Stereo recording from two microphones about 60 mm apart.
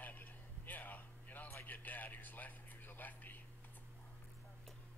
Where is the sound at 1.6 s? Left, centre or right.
Left.